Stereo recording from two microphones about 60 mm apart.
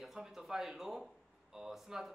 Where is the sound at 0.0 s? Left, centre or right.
Centre.